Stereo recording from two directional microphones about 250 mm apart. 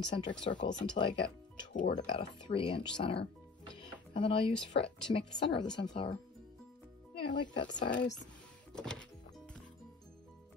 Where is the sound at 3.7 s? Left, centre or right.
Centre.